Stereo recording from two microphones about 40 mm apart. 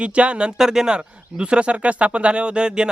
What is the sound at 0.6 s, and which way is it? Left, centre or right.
Speech, centre.